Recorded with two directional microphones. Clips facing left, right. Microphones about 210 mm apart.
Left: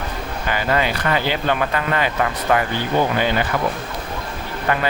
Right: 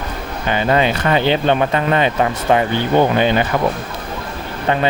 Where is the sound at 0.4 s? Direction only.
25° right (ahead or behind).